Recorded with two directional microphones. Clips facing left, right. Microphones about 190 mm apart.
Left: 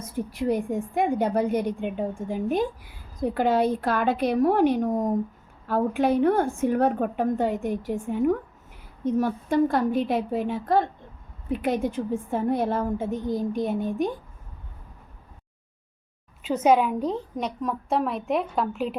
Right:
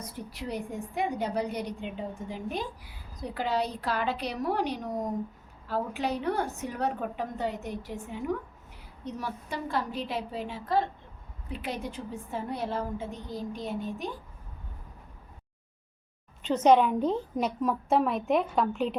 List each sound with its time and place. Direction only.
0.0 s a woman's voice: 50° left (ahead or behind)
16.4 s a woman's voice: 10° left (ahead or behind)